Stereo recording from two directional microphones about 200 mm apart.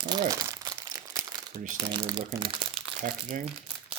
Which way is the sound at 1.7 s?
20° right (ahead or behind).